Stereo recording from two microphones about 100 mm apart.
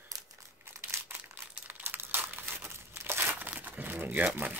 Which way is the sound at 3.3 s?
15° right (ahead or behind).